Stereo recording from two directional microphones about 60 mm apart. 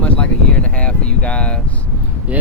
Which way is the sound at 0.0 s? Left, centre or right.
Centre.